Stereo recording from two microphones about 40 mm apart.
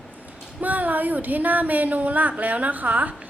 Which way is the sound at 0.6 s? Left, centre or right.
Right.